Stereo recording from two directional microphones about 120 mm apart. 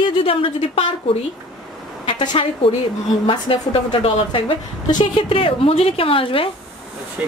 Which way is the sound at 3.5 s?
55° left (ahead or behind).